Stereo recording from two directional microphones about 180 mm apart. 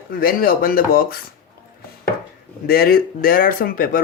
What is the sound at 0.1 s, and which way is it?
Speech, 55° left (ahead or behind).